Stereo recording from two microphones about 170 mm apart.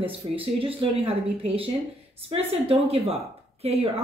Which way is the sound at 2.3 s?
35° right (ahead or behind).